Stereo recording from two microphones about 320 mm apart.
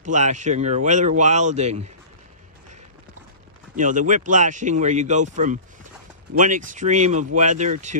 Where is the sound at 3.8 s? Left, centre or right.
Right.